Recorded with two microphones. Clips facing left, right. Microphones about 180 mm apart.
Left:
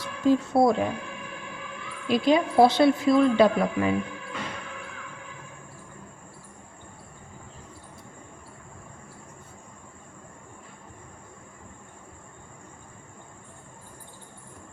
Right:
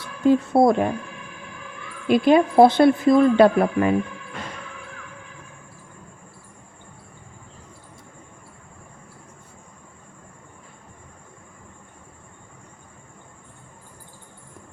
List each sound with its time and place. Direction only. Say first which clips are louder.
0.3 s speech: right 4 dB; 55° right (ahead or behind)
2.0 s speech: right 5 dB; 55° right (ahead or behind)